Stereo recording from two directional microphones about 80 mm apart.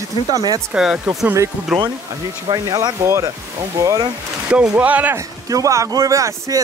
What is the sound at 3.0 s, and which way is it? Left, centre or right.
Speech, right.